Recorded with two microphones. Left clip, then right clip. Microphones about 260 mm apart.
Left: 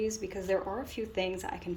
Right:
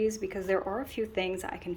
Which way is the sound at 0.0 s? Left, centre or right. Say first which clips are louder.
Right 4 dB; centre.